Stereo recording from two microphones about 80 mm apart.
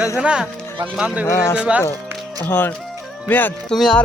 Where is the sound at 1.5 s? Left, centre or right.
Centre.